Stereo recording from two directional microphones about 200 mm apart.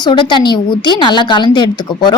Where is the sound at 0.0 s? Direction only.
25° left (ahead or behind).